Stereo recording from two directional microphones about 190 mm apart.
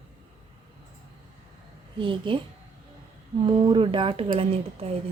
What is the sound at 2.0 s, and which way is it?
Speech, 25° right (ahead or behind).